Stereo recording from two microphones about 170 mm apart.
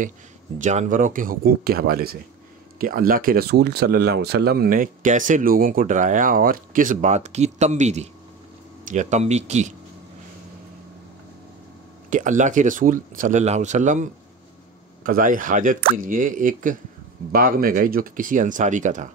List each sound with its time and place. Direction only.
0.6 s speech: 45° right (ahead or behind)
12.1 s speech: 50° right (ahead or behind)
15.0 s speech: 55° right (ahead or behind)